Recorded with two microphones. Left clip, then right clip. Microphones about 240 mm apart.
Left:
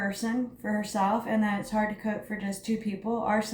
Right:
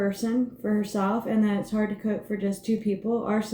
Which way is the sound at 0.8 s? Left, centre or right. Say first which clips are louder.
Left 2 dB; centre.